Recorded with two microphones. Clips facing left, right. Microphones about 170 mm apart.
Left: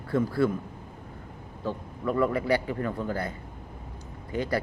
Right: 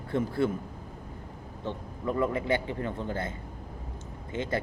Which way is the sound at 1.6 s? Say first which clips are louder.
Left 3 dB; 20° right (ahead or behind).